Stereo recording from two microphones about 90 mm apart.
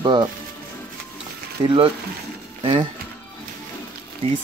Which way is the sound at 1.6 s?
70° right (ahead or behind).